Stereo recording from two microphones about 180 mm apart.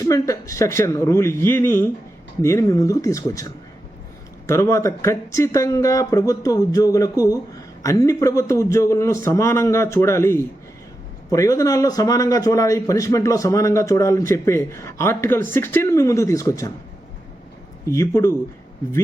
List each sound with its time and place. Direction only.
0.0 s a man's voice: 20° left (ahead or behind)
4.4 s a man's voice: 15° left (ahead or behind)
17.8 s a man's voice: 15° left (ahead or behind)